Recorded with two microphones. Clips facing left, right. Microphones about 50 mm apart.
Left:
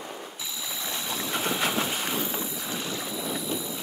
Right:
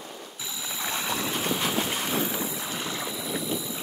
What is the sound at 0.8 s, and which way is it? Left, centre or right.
Ratchet, right.